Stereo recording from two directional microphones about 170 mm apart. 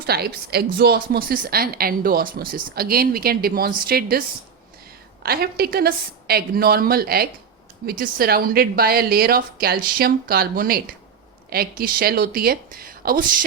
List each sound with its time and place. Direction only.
0.0 s a woman's voice: 65° right (ahead or behind)
5.2 s a woman's voice: 60° right (ahead or behind)